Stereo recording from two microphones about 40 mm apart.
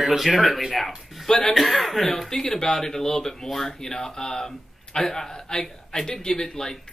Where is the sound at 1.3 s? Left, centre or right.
Centre.